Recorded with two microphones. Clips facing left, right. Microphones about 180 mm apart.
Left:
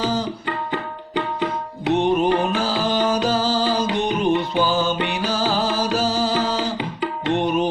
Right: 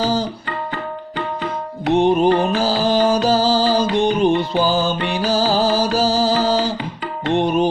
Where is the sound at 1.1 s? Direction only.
15° left (ahead or behind).